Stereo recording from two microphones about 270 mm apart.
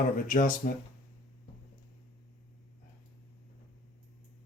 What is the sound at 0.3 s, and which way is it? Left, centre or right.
Speech, left.